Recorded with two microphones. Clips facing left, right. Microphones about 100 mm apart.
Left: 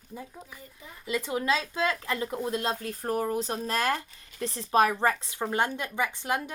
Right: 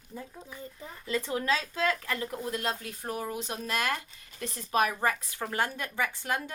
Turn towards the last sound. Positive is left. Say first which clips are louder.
# left 2 dB
turn(degrees=20)  # may be behind; listen again after turning